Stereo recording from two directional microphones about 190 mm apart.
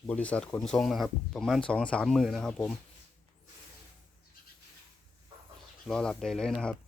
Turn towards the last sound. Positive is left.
turn(degrees=5)  # may be behind; listen again after turning